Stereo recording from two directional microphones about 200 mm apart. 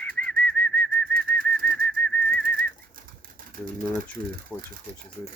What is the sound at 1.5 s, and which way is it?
Bird, 5° left (ahead or behind).